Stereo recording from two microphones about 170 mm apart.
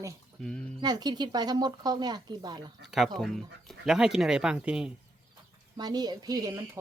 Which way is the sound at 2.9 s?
Centre (ahead or behind).